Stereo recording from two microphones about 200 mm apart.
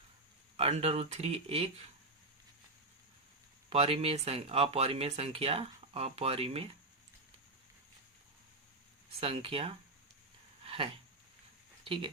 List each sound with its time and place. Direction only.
0.5 s speech: 30° right (ahead or behind)
3.7 s speech: 30° right (ahead or behind)
9.2 s speech: 30° right (ahead or behind)
10.6 s a sound: 30° right (ahead or behind)
11.9 s speech: 25° right (ahead or behind)